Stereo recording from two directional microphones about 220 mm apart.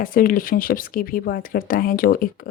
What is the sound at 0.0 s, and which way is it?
Speech, 40° left (ahead or behind).